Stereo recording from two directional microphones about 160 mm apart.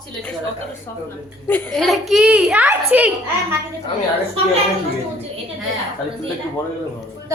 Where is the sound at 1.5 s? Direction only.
5° left (ahead or behind); by 3.1 s 10° right (ahead or behind).